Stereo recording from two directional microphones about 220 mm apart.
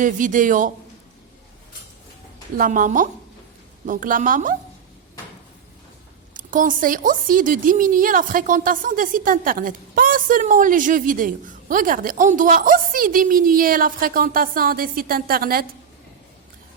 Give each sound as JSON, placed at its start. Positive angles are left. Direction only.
{"t": 0.0, "sound": "a woman's voice", "side_deg": -35}
{"t": 2.6, "sound": "a woman's voice", "side_deg": -35}
{"t": 6.3, "sound": "a woman's voice", "side_deg": -35}